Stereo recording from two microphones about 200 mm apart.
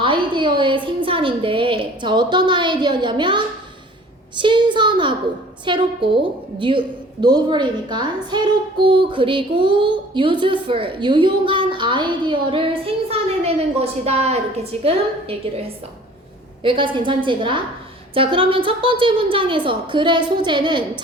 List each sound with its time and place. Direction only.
0.0 s a woman's voice: 25° right (ahead or behind)